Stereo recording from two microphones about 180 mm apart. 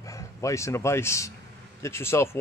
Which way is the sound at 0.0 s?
15° left (ahead or behind).